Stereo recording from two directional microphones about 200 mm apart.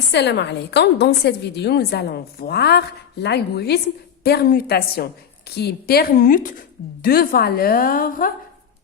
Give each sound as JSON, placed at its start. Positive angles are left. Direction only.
{"t": 0.1, "sound": "a woman's voice", "side_deg": 60}